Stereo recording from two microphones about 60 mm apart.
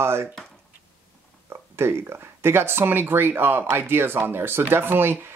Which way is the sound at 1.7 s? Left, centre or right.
Right.